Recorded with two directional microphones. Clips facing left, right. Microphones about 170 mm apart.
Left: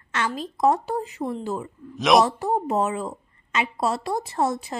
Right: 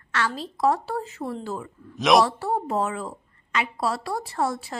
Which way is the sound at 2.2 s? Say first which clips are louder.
Left 2 dB; 15° left (ahead or behind).